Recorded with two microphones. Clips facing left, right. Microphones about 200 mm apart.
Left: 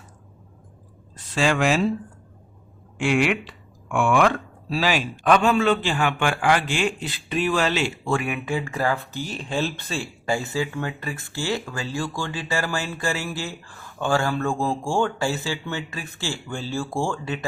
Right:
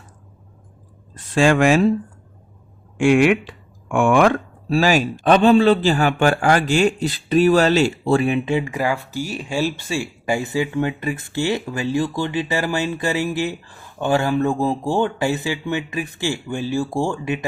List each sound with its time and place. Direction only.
1.1 s speech: 50° right (ahead or behind)
3.0 s speech: 50° right (ahead or behind); by 17.4 s 15° right (ahead or behind)